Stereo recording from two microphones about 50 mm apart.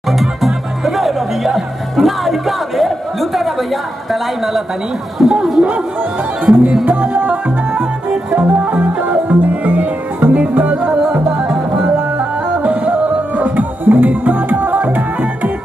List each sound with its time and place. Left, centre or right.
0.1 s music: centre
5.2 s speech: centre
6.4 s music: right
7.7 s music: right
12.2 s music: right
13.4 s music: right